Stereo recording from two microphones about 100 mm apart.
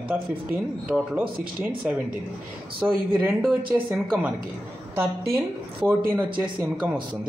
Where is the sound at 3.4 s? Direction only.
Centre (ahead or behind).